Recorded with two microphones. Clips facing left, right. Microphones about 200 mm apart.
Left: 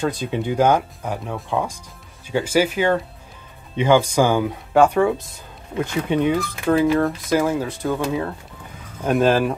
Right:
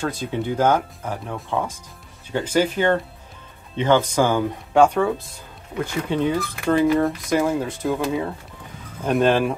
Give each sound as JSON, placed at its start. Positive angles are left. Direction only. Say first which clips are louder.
{"t": 0.0, "sound": "speech", "louder": "left 2 dB", "side_deg": 15}
{"t": 6.7, "sound": "speech", "louder": "left 1 dB", "side_deg": 0}